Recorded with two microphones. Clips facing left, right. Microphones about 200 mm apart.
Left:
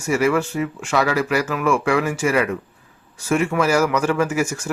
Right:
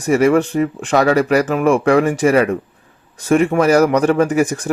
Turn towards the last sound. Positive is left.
turn(degrees=-35)  # may be behind; listen again after turning